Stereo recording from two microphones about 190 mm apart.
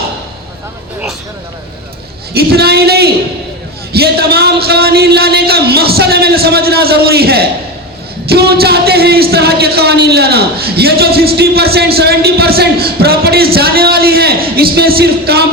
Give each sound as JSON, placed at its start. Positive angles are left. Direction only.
{"t": 2.3, "sound": "a man's voice", "side_deg": -55}
{"t": 3.9, "sound": "a sound", "side_deg": -55}
{"t": 8.3, "sound": "a man's voice", "side_deg": -55}